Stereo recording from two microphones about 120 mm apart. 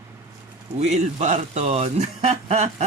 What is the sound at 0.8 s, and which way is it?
Speech, 70° right (ahead or behind).